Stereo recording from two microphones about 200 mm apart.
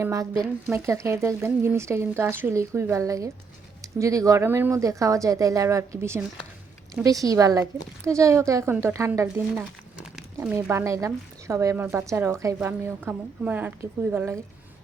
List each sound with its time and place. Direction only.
0.0 s speech: 15° right (ahead or behind)